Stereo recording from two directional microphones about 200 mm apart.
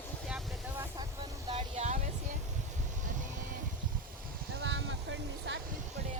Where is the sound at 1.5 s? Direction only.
35° right (ahead or behind).